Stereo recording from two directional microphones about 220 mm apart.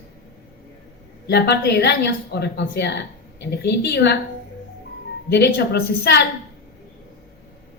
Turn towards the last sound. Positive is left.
turn(degrees=45)  # may be behind; listen again after turning